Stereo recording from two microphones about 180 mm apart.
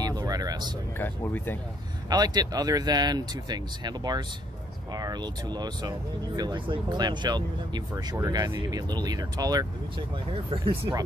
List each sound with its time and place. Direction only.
0.0 s vehicle: 20° right (ahead or behind)
0.9 s speech: 10° left (ahead or behind)
2.0 s speech: 20° right (ahead or behind)